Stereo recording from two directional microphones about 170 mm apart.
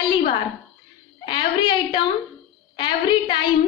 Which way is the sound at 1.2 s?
30° left (ahead or behind).